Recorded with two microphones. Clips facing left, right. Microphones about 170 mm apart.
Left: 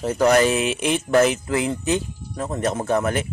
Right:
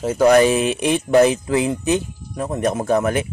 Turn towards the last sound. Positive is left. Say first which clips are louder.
# right 3 dB
turn(degrees=-15)  # may be behind; listen again after turning